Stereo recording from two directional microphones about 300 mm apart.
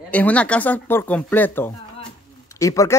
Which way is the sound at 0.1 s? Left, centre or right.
Centre.